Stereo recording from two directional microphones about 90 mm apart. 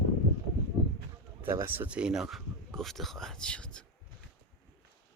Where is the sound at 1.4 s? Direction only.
30° right (ahead or behind).